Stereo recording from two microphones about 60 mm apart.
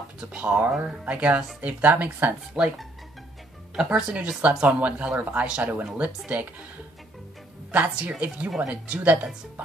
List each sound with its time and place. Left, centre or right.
0.2 s speech: centre
0.7 s speech: centre
1.0 s speech: right
3.7 s speech: centre
7.7 s speech: right